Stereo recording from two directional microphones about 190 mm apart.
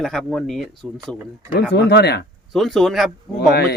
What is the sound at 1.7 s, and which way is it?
Speech, 60° left (ahead or behind).